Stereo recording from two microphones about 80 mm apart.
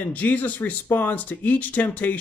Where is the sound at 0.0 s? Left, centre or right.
Centre.